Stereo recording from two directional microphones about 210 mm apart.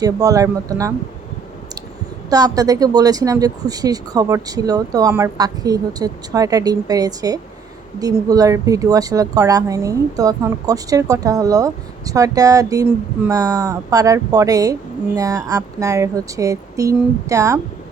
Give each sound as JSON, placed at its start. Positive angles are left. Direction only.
{"t": 0.0, "sound": "speech", "side_deg": -15}
{"t": 2.3, "sound": "speech", "side_deg": -15}